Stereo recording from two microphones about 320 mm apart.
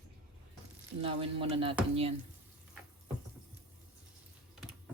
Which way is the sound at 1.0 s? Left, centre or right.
Centre.